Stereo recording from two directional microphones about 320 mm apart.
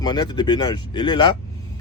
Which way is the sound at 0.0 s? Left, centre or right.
Centre.